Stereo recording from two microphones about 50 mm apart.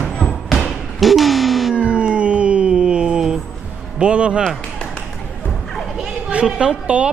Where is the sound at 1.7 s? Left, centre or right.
Right.